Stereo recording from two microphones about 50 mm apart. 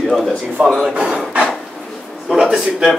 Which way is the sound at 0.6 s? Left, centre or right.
Centre.